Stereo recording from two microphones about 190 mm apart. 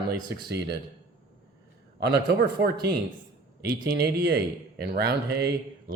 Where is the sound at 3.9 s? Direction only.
60° right (ahead or behind).